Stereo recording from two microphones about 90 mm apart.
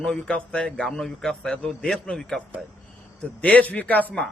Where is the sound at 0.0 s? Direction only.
10° left (ahead or behind).